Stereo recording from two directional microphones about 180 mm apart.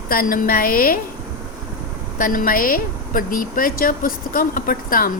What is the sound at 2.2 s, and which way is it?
Speech, 50° left (ahead or behind).